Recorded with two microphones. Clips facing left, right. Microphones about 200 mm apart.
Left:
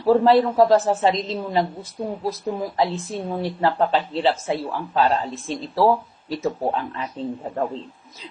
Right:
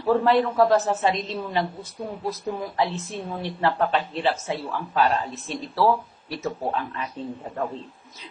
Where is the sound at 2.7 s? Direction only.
15° left (ahead or behind).